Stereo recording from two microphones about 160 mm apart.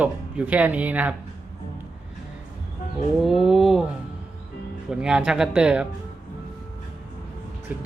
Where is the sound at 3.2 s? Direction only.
Centre (ahead or behind).